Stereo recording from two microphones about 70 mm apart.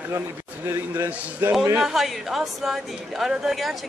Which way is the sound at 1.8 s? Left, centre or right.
Centre.